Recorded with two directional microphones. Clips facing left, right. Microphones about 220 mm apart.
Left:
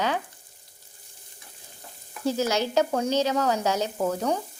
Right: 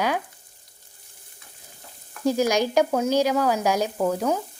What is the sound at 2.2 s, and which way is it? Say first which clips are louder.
Speech: right 4 dB; 15° right (ahead or behind).